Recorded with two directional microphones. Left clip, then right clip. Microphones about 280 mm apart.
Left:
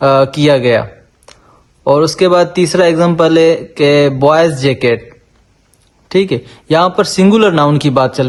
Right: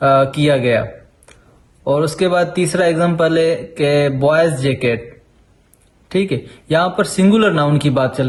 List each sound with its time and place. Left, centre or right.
0.0 s a man's voice: left
6.1 s a man's voice: left